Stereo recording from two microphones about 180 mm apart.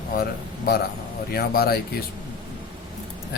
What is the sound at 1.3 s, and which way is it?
Speech, 60° left (ahead or behind).